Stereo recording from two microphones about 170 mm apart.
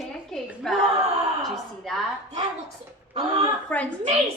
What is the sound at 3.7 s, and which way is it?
Speech, 10° left (ahead or behind).